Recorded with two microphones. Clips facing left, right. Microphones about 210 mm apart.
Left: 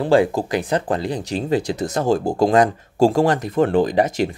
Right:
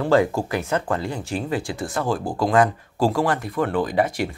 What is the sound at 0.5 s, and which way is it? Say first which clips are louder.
Speech: left 3 dB; 15° left (ahead or behind).